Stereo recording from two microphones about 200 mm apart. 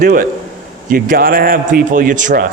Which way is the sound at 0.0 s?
45° right (ahead or behind).